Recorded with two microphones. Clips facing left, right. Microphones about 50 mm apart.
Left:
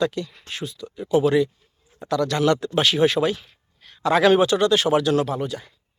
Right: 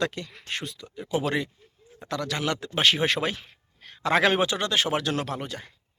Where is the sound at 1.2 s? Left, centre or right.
Right.